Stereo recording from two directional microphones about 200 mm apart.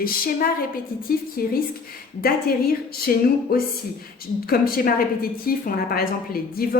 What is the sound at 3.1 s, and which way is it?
A woman's voice, 45° left (ahead or behind).